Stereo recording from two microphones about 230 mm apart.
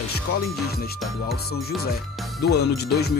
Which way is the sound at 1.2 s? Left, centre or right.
Left.